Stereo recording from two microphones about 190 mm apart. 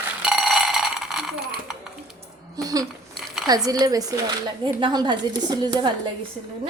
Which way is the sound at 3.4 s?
20° right (ahead or behind).